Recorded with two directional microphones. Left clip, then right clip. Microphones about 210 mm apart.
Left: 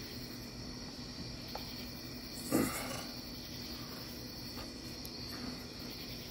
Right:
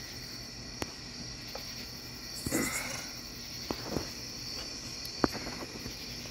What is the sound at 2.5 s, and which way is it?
Wild animals, 15° left (ahead or behind).